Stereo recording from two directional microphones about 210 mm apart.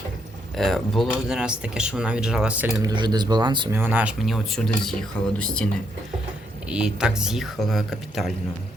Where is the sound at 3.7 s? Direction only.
10° right (ahead or behind).